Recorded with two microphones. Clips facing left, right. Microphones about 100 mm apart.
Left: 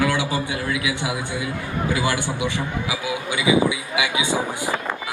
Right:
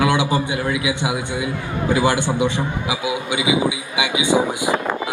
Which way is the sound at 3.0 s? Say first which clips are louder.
Right 2 dB; 20° right (ahead or behind).